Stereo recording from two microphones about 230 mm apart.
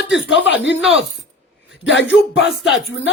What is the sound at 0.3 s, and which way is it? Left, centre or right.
Speech, left.